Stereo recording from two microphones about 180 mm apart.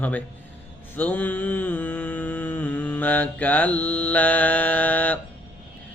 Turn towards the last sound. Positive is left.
turn(degrees=10)  # may be behind; listen again after turning